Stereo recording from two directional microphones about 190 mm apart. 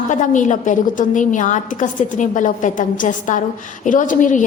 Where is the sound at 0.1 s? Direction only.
40° left (ahead or behind).